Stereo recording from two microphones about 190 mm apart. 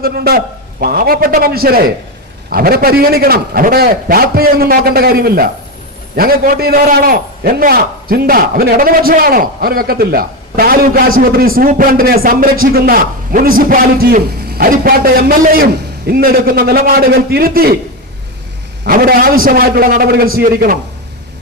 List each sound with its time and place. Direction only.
0.0 s a man's voice: 55° right (ahead or behind)
18.9 s a man's voice: 50° right (ahead or behind)